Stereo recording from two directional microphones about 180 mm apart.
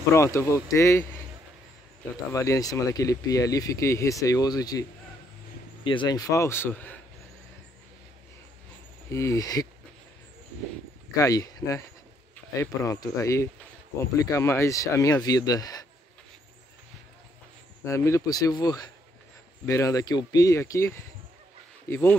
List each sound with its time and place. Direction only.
0.1 s speech: 15° left (ahead or behind)
2.3 s speech: 15° left (ahead or behind)
5.9 s speech: 25° left (ahead or behind)
9.1 s speech: 15° left (ahead or behind)
11.1 s speech: 20° left (ahead or behind)
17.8 s speech: 15° left (ahead or behind)